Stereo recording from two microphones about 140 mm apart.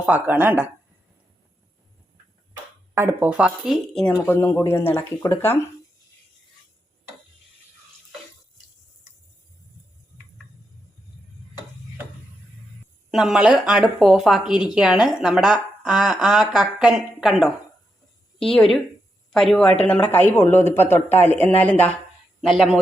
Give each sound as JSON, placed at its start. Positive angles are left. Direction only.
{"t": 0.0, "sound": "a woman's voice", "side_deg": -10}
{"t": 2.9, "sound": "a woman's voice", "side_deg": -20}
{"t": 4.2, "sound": "speech", "side_deg": 15}
{"t": 13.1, "sound": "a woman's voice", "side_deg": -5}
{"t": 22.4, "sound": "speech", "side_deg": -5}